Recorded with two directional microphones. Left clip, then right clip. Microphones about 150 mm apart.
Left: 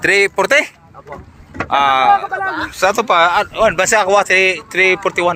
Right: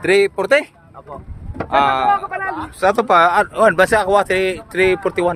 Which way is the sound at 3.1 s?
45° right (ahead or behind).